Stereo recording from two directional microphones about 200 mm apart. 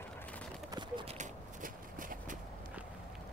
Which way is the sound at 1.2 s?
40° right (ahead or behind).